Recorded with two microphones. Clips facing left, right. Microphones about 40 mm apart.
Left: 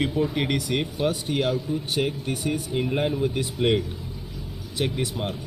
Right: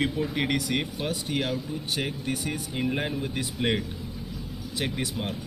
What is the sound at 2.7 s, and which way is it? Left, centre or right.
Speech, centre.